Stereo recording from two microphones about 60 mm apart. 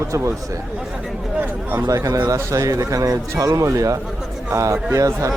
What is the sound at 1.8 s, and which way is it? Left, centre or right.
Speech, right.